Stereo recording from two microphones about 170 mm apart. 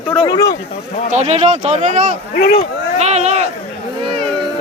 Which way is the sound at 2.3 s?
65° left (ahead or behind).